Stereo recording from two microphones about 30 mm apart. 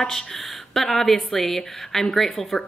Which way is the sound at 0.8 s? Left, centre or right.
Centre.